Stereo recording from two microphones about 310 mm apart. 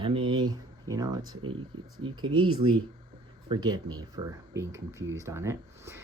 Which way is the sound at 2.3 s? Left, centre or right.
Right.